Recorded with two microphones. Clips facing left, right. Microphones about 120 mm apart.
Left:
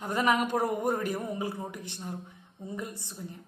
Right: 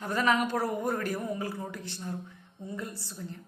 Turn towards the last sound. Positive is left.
turn(degrees=20)  # may be behind; listen again after turning